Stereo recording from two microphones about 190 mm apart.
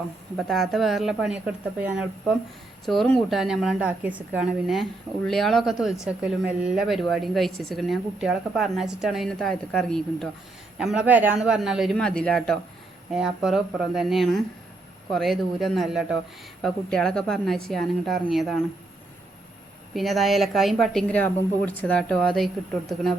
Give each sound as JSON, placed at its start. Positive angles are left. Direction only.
{"t": 0.3, "sound": "a woman's voice", "side_deg": 0}
{"t": 19.9, "sound": "a woman's voice", "side_deg": 0}